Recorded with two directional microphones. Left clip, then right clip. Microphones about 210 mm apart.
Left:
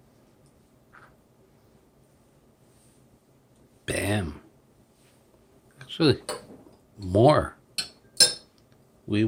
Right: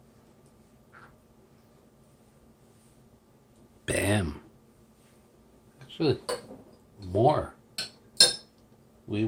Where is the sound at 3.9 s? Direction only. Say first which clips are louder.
Right 1 dB; centre (ahead or behind).